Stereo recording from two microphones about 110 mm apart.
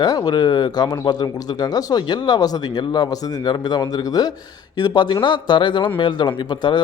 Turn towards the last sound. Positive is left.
turn(degrees=40)  # may be behind; listen again after turning